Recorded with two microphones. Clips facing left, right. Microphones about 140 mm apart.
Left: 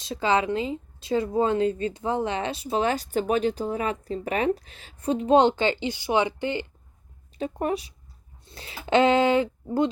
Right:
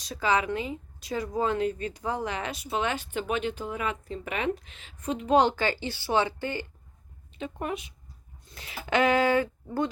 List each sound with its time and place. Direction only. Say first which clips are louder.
0.0 s a woman's voice: left 3 dB; 25° left (ahead or behind)
7.3 s a woman's voice: left 6 dB; 40° left (ahead or behind); by 9.9 s 20° left (ahead or behind)